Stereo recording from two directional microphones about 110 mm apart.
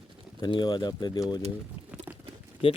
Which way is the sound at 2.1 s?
15° right (ahead or behind).